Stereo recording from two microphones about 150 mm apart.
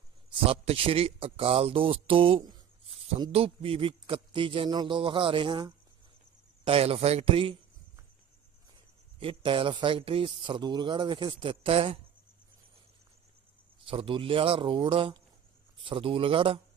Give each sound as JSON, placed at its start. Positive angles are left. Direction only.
{"t": 0.3, "sound": "speech", "side_deg": -40}
{"t": 9.2, "sound": "speech", "side_deg": -35}
{"t": 13.8, "sound": "speech", "side_deg": -35}